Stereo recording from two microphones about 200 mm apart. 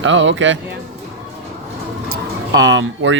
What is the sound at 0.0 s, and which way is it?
Speech, 70° right (ahead or behind).